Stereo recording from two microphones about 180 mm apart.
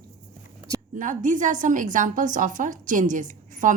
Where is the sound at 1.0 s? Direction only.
45° right (ahead or behind).